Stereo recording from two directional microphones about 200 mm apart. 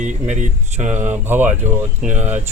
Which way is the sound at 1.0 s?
10° right (ahead or behind).